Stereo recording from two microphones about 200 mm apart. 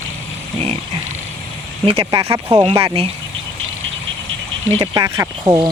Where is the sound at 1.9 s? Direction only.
25° right (ahead or behind).